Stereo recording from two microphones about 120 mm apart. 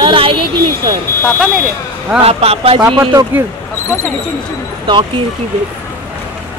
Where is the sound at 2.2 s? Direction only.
55° right (ahead or behind).